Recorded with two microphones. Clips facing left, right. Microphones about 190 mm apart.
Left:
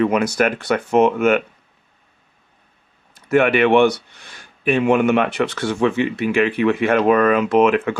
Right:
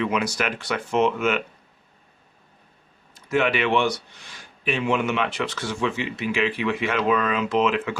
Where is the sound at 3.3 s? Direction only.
55° left (ahead or behind).